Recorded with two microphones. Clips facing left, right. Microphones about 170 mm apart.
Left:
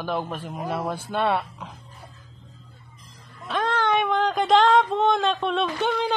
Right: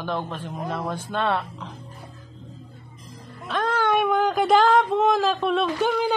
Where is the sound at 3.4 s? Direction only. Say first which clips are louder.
Right 1 dB; centre (ahead or behind).